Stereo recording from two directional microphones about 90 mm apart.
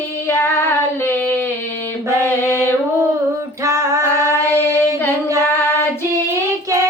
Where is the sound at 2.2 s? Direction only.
25° left (ahead or behind).